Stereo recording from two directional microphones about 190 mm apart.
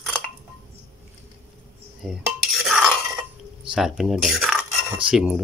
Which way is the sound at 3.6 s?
5° right (ahead or behind).